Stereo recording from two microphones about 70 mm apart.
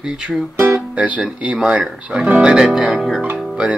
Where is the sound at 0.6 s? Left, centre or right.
Right.